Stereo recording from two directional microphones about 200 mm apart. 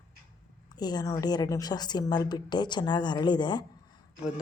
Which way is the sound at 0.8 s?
20° left (ahead or behind).